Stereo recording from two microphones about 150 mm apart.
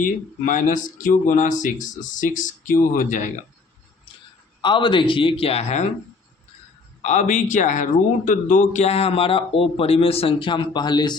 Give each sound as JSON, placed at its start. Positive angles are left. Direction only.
{"t": 0.0, "sound": "speech", "side_deg": 60}
{"t": 4.6, "sound": "speech", "side_deg": 30}
{"t": 7.0, "sound": "speech", "side_deg": 50}